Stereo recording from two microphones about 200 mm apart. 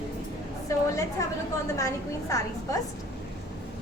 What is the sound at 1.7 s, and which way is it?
A woman's voice, 15° left (ahead or behind).